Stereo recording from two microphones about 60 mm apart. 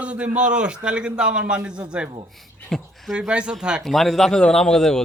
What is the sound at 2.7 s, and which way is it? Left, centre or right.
Speech, centre.